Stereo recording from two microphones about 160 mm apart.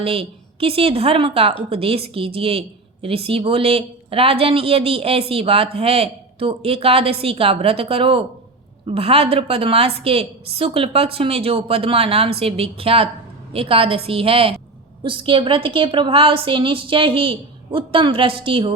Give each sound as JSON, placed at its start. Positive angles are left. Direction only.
{"t": 0.0, "sound": "a woman's voice", "side_deg": -35}